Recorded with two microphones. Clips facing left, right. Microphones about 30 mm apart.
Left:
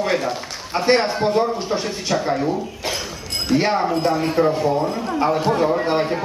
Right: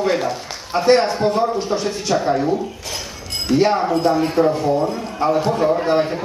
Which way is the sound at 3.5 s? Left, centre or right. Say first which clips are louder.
Right 3 dB; centre.